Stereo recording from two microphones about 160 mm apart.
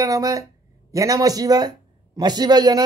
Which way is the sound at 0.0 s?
20° right (ahead or behind).